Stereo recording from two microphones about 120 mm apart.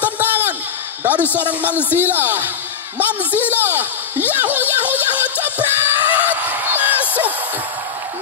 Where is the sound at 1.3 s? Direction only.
15° right (ahead or behind).